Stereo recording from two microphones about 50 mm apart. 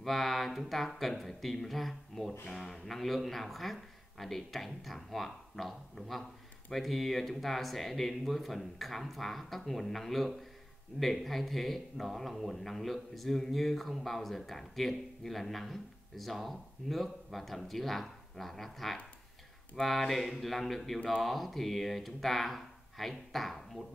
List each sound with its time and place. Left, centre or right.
0.0 s speech: centre